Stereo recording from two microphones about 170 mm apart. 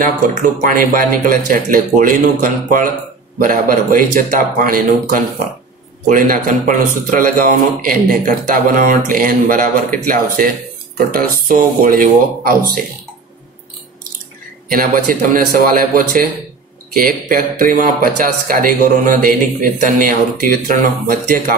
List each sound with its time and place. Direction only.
0.0 s speech: 50° right (ahead or behind)
14.7 s speech: 55° right (ahead or behind)